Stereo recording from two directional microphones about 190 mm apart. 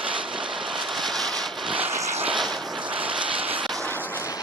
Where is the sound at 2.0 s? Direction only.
35° right (ahead or behind).